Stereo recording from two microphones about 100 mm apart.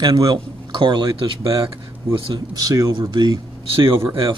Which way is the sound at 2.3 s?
40° right (ahead or behind).